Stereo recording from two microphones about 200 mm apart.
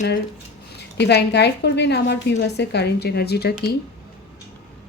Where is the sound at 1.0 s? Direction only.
55° left (ahead or behind).